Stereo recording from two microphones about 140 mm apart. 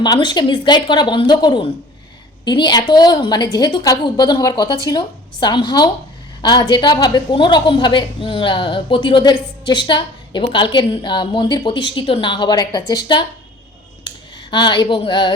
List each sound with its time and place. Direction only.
0.0 s a woman's voice: 30° left (ahead or behind)
14.5 s a woman's voice: 35° left (ahead or behind)